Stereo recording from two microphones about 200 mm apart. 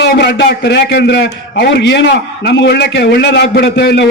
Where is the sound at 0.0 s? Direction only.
55° left (ahead or behind).